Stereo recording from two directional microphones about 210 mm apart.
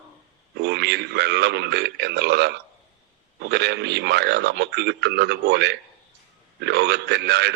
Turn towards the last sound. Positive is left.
turn(degrees=-50)  # may be behind; listen again after turning